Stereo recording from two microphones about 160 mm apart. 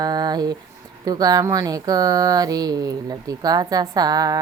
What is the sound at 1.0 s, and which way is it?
Speech, 25° right (ahead or behind).